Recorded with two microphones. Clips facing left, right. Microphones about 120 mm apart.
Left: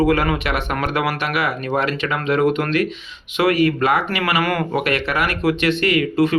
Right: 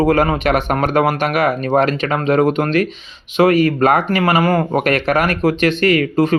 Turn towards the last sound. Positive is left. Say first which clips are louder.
# right 3 dB
turn(degrees=-40)  # may be behind; listen again after turning